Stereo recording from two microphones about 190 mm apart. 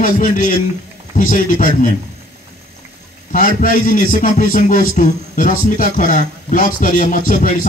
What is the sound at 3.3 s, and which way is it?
A man's voice, 45° left (ahead or behind).